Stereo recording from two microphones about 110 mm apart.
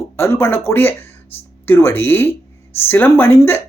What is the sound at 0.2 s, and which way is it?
A man's voice, 20° left (ahead or behind).